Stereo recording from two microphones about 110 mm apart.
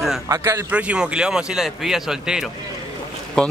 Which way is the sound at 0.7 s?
10° right (ahead or behind).